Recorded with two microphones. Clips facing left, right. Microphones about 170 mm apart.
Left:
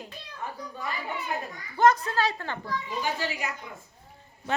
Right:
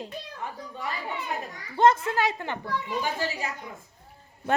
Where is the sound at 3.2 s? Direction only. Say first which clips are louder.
Right 1 dB; 40° right (ahead or behind).